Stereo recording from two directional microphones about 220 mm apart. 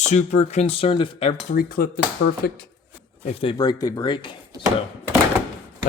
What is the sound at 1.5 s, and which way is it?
Speech, 40° left (ahead or behind).